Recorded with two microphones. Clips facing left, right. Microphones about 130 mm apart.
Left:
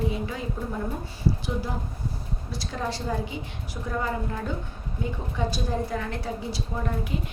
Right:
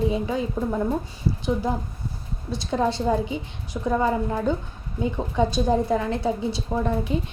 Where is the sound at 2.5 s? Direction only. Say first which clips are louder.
Right 8 dB; 25° right (ahead or behind).